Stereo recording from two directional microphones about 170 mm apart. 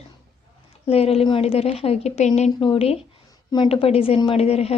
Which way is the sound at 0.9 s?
35° left (ahead or behind).